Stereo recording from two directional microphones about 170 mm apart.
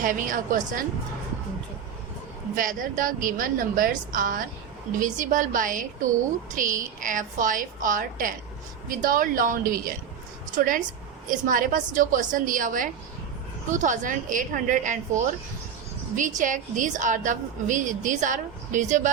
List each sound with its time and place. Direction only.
0.0 s a woman's voice: 50° right (ahead or behind)
2.6 s a woman's voice: 55° right (ahead or behind)